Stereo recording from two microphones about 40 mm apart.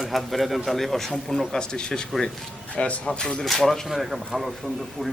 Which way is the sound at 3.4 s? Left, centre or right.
Centre.